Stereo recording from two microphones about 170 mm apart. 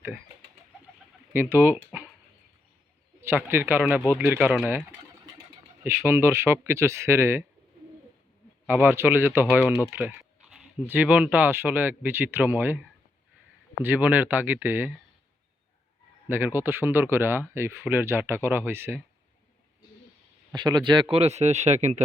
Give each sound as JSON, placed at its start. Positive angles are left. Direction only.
{"t": 1.3, "sound": "speech", "side_deg": -15}
{"t": 3.2, "sound": "speech", "side_deg": -15}
{"t": 8.6, "sound": "speech", "side_deg": -10}
{"t": 13.8, "sound": "speech", "side_deg": -10}
{"t": 16.3, "sound": "speech", "side_deg": -15}
{"t": 20.5, "sound": "speech", "side_deg": -25}